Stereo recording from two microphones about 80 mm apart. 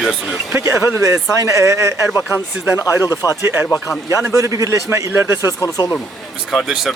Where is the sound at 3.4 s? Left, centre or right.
Right.